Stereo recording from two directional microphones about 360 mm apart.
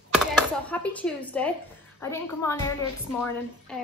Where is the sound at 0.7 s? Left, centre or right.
Centre.